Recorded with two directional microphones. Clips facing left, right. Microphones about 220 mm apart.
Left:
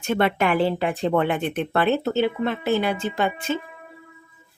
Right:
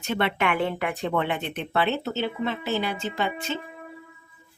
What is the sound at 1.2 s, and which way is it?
Speech, 50° left (ahead or behind).